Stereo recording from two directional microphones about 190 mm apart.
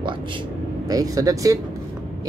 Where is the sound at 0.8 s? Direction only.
20° right (ahead or behind).